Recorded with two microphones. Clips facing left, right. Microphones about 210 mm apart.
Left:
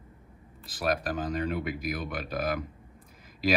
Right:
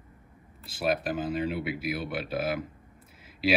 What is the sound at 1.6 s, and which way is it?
Speech, 45° left (ahead or behind).